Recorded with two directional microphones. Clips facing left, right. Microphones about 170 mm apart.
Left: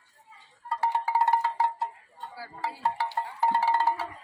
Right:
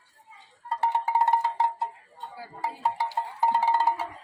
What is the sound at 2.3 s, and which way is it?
Music, 15° right (ahead or behind).